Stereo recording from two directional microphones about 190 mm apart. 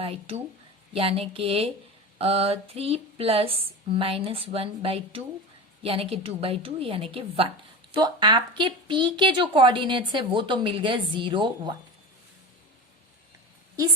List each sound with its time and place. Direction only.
0.0 s a woman's voice: 30° right (ahead or behind)
2.1 s a sound: 30° right (ahead or behind)
3.9 s a woman's voice: 30° right (ahead or behind)